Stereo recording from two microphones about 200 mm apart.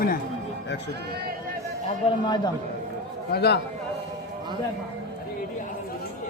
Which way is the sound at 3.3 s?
55° left (ahead or behind).